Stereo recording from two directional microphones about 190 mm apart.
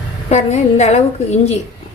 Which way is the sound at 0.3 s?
35° left (ahead or behind).